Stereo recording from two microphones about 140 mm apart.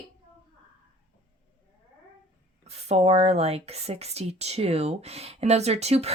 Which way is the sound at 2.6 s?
50° right (ahead or behind).